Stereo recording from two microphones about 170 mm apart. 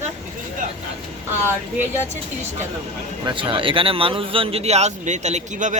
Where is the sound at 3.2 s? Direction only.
30° right (ahead or behind).